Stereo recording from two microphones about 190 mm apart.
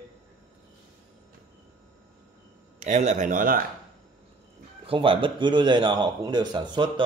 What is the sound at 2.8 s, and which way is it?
Speech, 40° right (ahead or behind).